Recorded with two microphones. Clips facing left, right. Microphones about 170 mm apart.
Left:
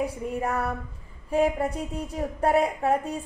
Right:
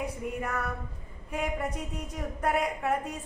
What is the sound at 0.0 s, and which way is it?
A woman's voice, 30° left (ahead or behind).